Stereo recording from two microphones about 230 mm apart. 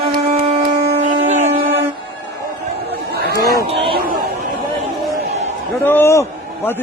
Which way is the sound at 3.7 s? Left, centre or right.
Right.